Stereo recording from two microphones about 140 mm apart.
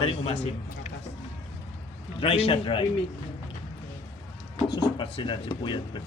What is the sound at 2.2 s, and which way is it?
Speech, 40° left (ahead or behind).